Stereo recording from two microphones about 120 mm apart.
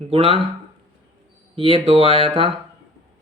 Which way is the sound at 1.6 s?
55° right (ahead or behind).